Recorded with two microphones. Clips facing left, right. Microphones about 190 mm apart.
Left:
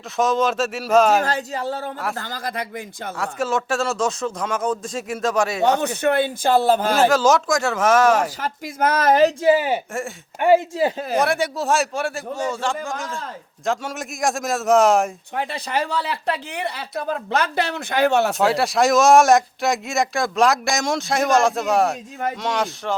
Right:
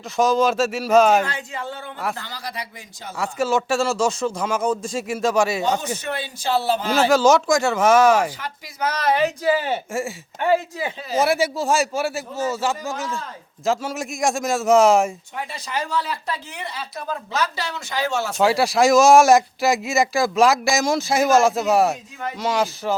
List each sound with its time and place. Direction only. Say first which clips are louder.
0.2 s speech: right 2 dB; centre (ahead or behind)
1.2 s speech: left 4 dB; 40° left (ahead or behind)
3.2 s speech: right 2 dB; centre (ahead or behind)
5.6 s speech: left 5 dB; 65° left (ahead or behind)
7.1 s speech: right 2 dB; centre (ahead or behind)
8.4 s speech: left 5 dB; 45° left (ahead or behind)
9.4 s speech: left 4 dB; 15° left (ahead or behind)
10.8 s speech: left 7 dB; 35° left (ahead or behind)
11.2 s speech: right 2 dB; 5° right (ahead or behind)
15.4 s speech: left 4 dB; 60° left (ahead or behind)
18.3 s speech: right 1 dB; centre (ahead or behind)